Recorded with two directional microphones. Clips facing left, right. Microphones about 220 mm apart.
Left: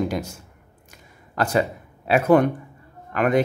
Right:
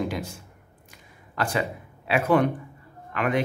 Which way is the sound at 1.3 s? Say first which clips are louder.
Left 5 dB; 40° left (ahead or behind).